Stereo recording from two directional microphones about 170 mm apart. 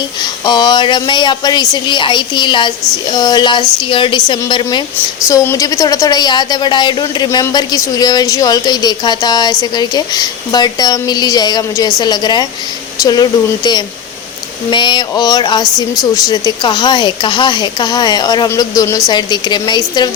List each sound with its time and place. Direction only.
0.2 s a woman's voice: 25° left (ahead or behind)